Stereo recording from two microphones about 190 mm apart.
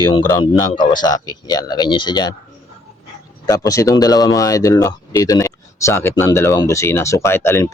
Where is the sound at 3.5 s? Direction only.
20° left (ahead or behind).